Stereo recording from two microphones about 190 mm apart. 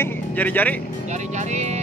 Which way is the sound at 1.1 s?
40° right (ahead or behind).